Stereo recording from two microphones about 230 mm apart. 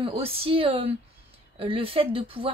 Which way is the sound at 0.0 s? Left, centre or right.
Right.